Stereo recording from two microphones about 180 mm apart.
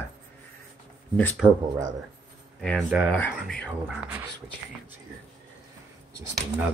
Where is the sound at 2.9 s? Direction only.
5° right (ahead or behind).